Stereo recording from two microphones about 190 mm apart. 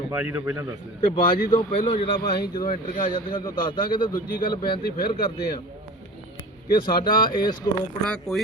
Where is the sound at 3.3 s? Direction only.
25° left (ahead or behind).